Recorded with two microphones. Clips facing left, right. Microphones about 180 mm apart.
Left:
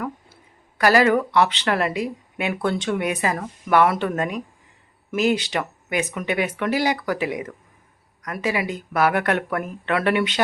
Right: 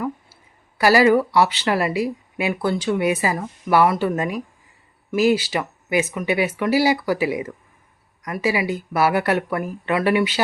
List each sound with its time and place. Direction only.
0.8 s speech: 10° right (ahead or behind)